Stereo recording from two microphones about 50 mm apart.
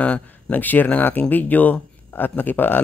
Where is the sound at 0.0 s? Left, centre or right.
Left.